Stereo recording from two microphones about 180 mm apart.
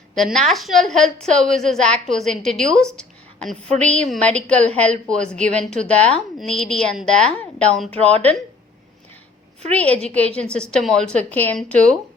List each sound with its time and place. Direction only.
0.1 s a woman's voice: centre (ahead or behind)
8.1 s speech: 35° right (ahead or behind)
9.7 s a woman's voice: 10° left (ahead or behind)